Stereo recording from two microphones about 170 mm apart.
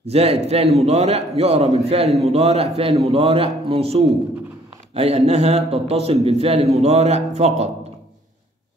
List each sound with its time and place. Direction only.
0.0 s a man's voice: 35° right (ahead or behind)